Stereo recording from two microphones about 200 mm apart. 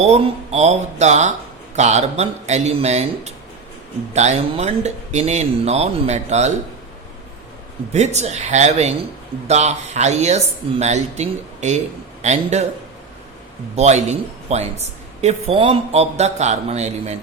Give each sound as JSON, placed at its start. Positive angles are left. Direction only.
{"t": 0.0, "sound": "a man's voice", "side_deg": -30}
{"t": 7.9, "sound": "a man's voice", "side_deg": -35}
{"t": 13.7, "sound": "a man's voice", "side_deg": -35}